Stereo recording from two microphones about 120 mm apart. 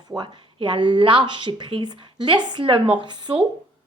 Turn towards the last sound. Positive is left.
turn(degrees=-40)  # may be behind; listen again after turning